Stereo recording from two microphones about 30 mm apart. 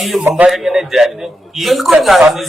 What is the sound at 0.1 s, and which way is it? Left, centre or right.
A man's voice, centre.